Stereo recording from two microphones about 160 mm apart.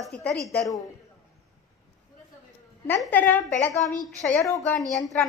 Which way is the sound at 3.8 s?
55° left (ahead or behind).